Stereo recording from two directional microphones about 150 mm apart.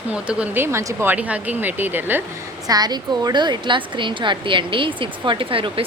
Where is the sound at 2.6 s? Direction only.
25° right (ahead or behind).